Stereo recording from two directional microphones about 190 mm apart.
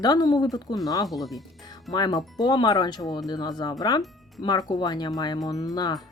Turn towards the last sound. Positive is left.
turn(degrees=20)  # may be behind; listen again after turning